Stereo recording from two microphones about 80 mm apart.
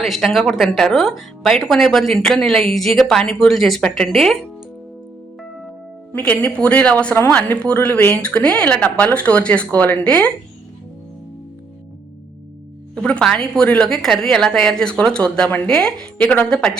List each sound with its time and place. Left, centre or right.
0.0 s speech: centre
6.1 s speech: centre
13.0 s speech: centre